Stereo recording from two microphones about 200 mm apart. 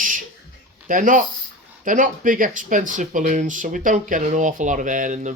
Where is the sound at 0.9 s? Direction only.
40° right (ahead or behind).